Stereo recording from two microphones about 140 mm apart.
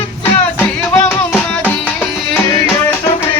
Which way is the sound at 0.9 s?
15° left (ahead or behind).